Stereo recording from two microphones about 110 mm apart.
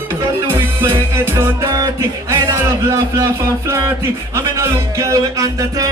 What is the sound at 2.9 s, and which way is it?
A man's voice, 25° right (ahead or behind).